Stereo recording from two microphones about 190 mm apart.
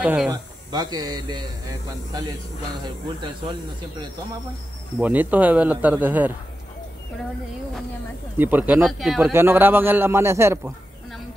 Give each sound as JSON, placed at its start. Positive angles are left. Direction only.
{"t": 0.0, "sound": "a man's voice", "side_deg": -5}
{"t": 0.3, "sound": "speech", "side_deg": -20}
{"t": 4.9, "sound": "a man's voice", "side_deg": -10}
{"t": 8.4, "sound": "a man's voice", "side_deg": -10}
{"t": 9.3, "sound": "a man's voice", "side_deg": -10}